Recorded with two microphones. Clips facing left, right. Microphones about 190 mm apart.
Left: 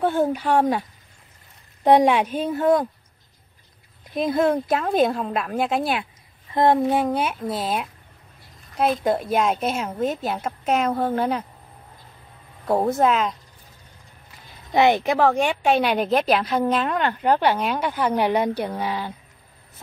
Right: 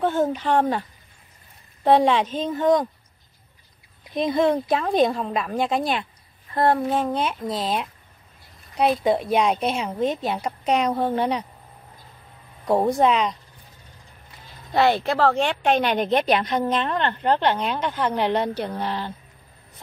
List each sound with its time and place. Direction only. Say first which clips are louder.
0.0 s a woman's voice: left 1 dB; 10° left (ahead or behind)
4.1 s speech: even; 5° left (ahead or behind)
6.5 s a woman's voice: left 2 dB; 15° left (ahead or behind); by 11.4 s centre (ahead or behind)
12.6 s speech: right 1 dB; 5° left (ahead or behind)
14.7 s a woman's voice: left 2 dB; 15° left (ahead or behind)